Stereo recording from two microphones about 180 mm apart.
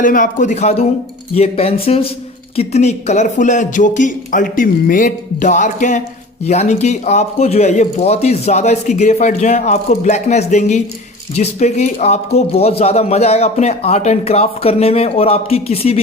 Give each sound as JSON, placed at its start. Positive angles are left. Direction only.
{"t": 0.0, "sound": "speech", "side_deg": 45}